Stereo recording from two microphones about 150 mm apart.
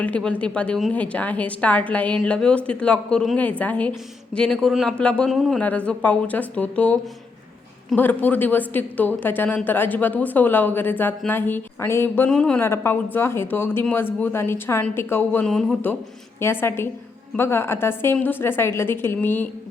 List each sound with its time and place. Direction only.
0.0 s a woman's voice: 10° left (ahead or behind)
16.4 s a woman's voice: 15° left (ahead or behind)